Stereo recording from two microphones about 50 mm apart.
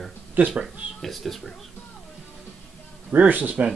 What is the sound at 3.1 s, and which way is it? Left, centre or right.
Speech, right.